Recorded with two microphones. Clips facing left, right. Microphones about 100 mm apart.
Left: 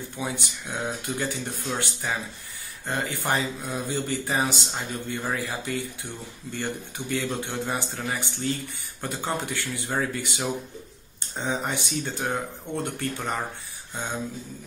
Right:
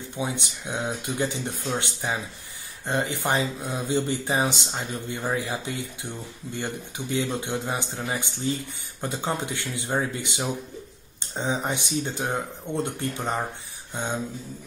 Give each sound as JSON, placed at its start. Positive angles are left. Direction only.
{"t": 0.2, "sound": "speech", "side_deg": -20}